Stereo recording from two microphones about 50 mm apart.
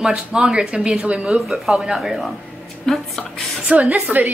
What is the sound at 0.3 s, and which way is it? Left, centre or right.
Speech, centre.